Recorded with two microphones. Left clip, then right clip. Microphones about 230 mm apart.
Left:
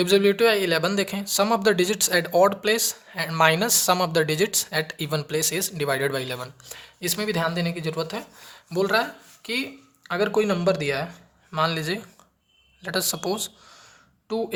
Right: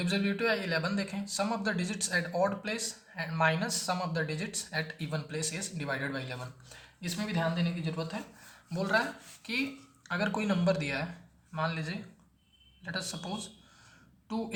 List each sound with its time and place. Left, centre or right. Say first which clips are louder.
0.0 s speech: left 13 dB; left
8.7 s speech: left 7 dB; left
11.5 s speech: left 10 dB; left
14.3 s a woman's voice: left 10 dB; left